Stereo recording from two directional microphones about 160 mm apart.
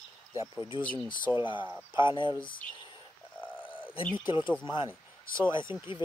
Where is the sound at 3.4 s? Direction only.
10° left (ahead or behind).